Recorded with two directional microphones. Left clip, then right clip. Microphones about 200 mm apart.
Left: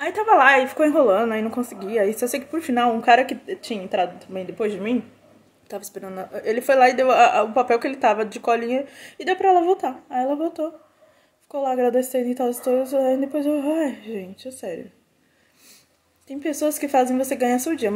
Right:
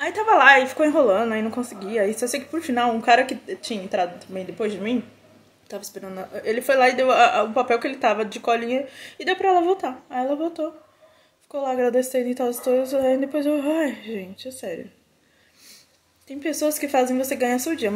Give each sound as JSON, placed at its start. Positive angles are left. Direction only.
{"t": 0.0, "sound": "a woman's voice", "side_deg": 10}
{"t": 16.3, "sound": "a woman's voice", "side_deg": 10}